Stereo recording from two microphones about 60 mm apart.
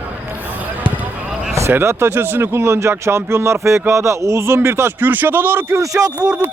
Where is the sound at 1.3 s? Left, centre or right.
Centre.